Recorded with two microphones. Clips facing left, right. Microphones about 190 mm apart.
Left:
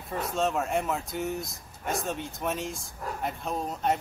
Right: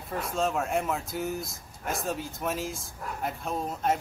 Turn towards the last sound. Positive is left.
turn(degrees=0)  # may be behind; listen again after turning